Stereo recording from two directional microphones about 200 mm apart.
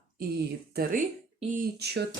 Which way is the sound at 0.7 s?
45° right (ahead or behind).